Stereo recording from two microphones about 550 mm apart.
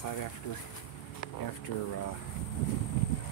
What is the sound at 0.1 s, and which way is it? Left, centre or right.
Speech, left.